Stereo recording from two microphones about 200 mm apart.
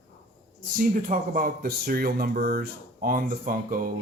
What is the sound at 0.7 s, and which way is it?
Speech, 45° right (ahead or behind).